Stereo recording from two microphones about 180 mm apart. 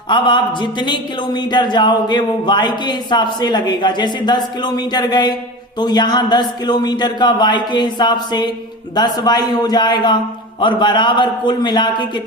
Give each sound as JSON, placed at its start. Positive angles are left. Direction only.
{"t": 0.1, "sound": "speech", "side_deg": 25}